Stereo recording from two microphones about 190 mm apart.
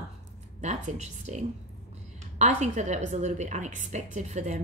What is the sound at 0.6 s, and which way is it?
Speech, 40° right (ahead or behind).